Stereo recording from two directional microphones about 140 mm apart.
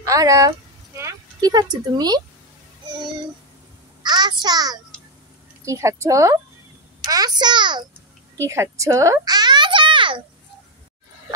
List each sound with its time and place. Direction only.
0.0 s speech: 25° right (ahead or behind)
4.0 s a child's voice: 30° right (ahead or behind)
8.5 s a child's voice: 20° right (ahead or behind); by 10.2 s 35° right (ahead or behind)